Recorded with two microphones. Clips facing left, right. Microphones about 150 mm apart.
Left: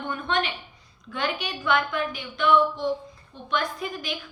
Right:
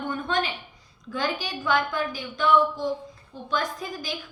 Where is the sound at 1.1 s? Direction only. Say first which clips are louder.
Right 1 dB; 40° right (ahead or behind).